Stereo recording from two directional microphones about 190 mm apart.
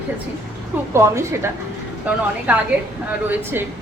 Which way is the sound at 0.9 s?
15° right (ahead or behind).